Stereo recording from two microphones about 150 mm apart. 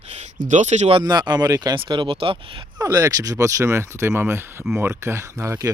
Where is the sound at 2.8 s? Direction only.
25° right (ahead or behind).